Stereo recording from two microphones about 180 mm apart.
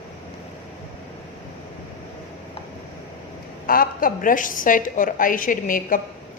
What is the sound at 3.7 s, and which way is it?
A woman's voice, 50° left (ahead or behind).